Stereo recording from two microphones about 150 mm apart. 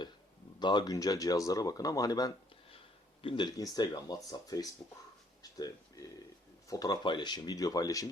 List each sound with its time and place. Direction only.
0.6 s speech: 30° left (ahead or behind)